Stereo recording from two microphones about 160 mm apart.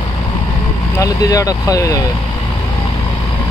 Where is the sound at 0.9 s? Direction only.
20° left (ahead or behind).